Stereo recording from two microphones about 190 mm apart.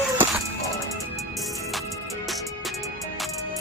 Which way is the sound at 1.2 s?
Centre (ahead or behind).